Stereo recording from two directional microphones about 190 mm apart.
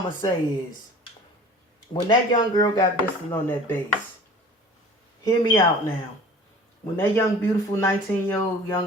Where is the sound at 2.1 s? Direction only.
20° left (ahead or behind).